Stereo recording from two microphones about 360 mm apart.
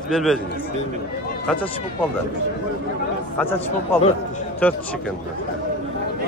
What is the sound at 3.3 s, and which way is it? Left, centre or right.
A man's voice, centre.